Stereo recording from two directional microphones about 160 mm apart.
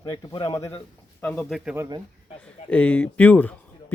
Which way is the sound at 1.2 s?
10° left (ahead or behind).